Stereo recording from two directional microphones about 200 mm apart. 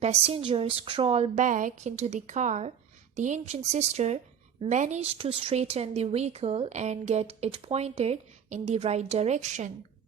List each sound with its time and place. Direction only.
0.0 s speech: 30° right (ahead or behind)